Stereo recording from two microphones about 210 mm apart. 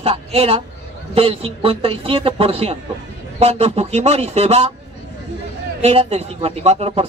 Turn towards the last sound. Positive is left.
turn(degrees=-30)  # may be behind; listen again after turning